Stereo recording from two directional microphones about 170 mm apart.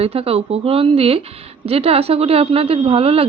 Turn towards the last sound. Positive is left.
turn(degrees=-35)  # may be behind; listen again after turning